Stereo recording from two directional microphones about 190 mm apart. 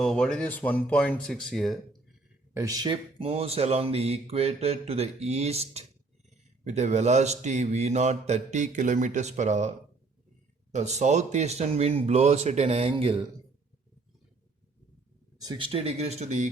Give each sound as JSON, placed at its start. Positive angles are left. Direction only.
{"t": 0.0, "sound": "speech", "side_deg": 5}
{"t": 2.5, "sound": "speech", "side_deg": -15}
{"t": 15.4, "sound": "speech", "side_deg": -30}